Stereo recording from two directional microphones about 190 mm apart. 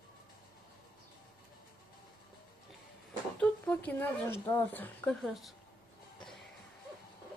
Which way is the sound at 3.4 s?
10° left (ahead or behind).